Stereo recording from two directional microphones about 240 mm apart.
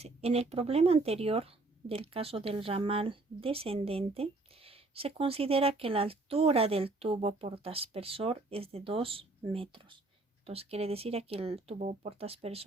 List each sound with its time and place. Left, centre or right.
0.0 s speech: right